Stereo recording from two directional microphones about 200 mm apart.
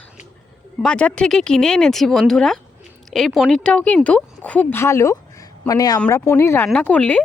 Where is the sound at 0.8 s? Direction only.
5° left (ahead or behind).